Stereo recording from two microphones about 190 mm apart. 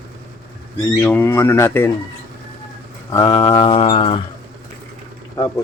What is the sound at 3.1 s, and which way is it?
Mantra, 25° left (ahead or behind).